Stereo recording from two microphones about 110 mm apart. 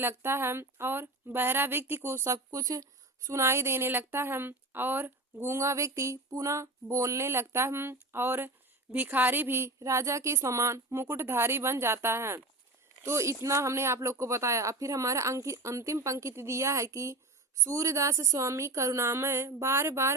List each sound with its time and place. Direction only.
0.0 s speech: 20° right (ahead or behind)